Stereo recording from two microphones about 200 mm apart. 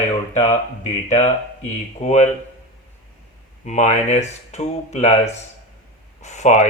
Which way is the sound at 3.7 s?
35° left (ahead or behind).